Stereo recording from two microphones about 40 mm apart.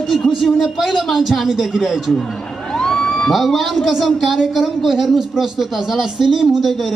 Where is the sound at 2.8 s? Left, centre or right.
Centre.